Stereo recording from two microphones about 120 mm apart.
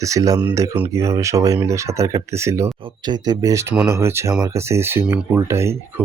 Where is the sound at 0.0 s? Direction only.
25° right (ahead or behind).